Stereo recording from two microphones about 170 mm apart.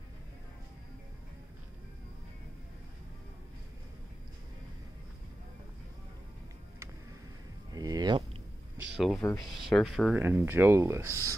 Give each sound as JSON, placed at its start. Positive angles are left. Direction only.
{"t": 7.7, "sound": "a sound", "side_deg": -20}
{"t": 8.9, "sound": "speech", "side_deg": 0}
{"t": 10.1, "sound": "speech", "side_deg": -10}